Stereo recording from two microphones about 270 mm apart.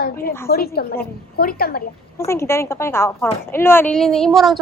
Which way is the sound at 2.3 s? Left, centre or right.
Centre.